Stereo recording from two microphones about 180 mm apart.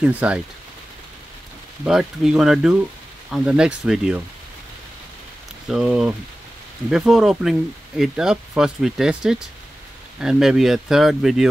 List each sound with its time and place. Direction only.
0.0 s speech: 10° right (ahead or behind)
1.9 s speech: 5° right (ahead or behind)
5.7 s speech: 5° right (ahead or behind)